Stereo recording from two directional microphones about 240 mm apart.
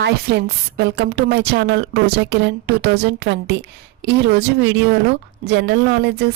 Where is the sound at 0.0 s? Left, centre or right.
Right.